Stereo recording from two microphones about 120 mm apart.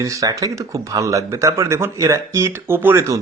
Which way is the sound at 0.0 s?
30° right (ahead or behind).